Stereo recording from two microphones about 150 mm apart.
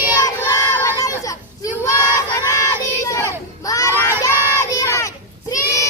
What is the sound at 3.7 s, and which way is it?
Crowd, 20° left (ahead or behind).